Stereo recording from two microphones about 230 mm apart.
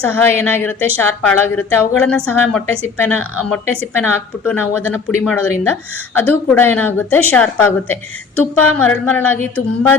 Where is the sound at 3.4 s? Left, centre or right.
Centre.